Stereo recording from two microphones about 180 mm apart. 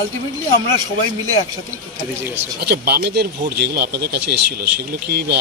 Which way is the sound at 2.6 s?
60° right (ahead or behind).